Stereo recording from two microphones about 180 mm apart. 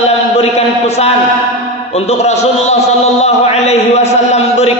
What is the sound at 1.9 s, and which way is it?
Speech, 35° left (ahead or behind).